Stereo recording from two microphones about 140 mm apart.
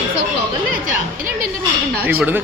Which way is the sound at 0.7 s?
85° right.